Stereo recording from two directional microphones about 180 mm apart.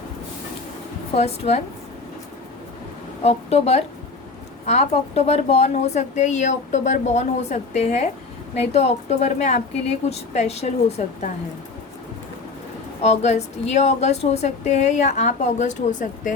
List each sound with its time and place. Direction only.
1.1 s speech: 35° left (ahead or behind)
3.2 s speech: 35° left (ahead or behind)
13.0 s speech: 40° left (ahead or behind)